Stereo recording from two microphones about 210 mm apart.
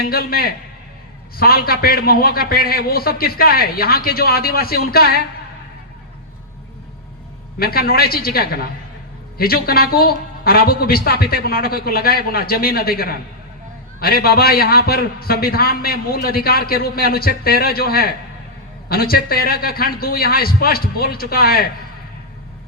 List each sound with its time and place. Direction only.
0.0 s a man's voice: 45° left (ahead or behind)
7.6 s a man's voice: 45° left (ahead or behind)